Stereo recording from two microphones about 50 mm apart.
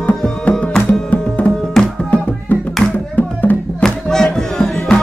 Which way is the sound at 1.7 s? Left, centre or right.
Centre.